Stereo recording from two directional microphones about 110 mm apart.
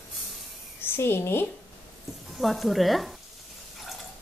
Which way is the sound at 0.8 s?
20° left (ahead or behind).